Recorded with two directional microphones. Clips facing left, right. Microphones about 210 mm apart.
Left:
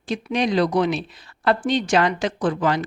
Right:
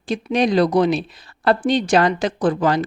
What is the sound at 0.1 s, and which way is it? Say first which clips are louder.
Speech: right 4 dB; 35° right (ahead or behind).